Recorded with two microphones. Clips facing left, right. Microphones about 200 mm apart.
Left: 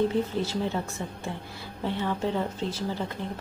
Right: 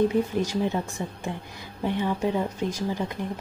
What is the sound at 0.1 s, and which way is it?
Speech, 15° right (ahead or behind).